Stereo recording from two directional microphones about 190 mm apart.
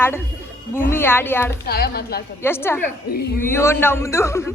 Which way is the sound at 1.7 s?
55° left (ahead or behind).